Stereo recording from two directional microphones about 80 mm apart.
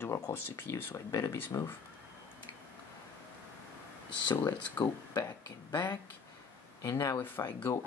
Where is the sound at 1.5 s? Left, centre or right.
Left.